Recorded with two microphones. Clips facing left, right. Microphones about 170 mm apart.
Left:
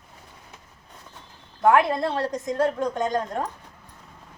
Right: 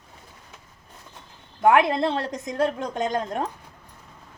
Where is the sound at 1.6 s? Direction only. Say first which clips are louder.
Right 1 dB; 20° right (ahead or behind).